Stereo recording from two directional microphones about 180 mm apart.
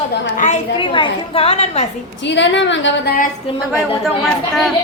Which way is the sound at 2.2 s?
80° left.